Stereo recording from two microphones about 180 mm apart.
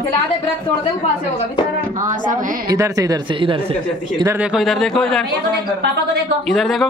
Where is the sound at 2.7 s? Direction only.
20° right (ahead or behind).